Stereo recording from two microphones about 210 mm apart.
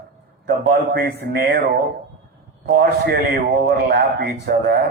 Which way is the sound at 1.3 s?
50° right (ahead or behind).